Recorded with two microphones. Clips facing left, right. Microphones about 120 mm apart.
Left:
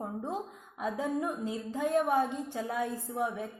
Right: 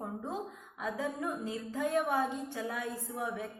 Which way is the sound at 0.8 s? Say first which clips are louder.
Left 3 dB; 20° left (ahead or behind).